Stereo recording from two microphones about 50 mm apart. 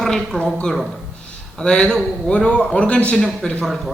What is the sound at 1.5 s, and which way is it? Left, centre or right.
A man's voice, centre.